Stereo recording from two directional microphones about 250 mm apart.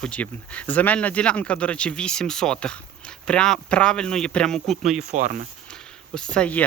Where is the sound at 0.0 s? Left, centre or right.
Centre.